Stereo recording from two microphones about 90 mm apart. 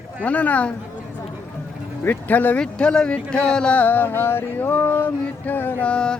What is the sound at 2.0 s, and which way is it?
Speech, 20° left (ahead or behind).